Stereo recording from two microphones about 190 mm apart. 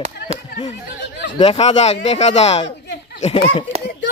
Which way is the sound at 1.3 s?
35° left (ahead or behind).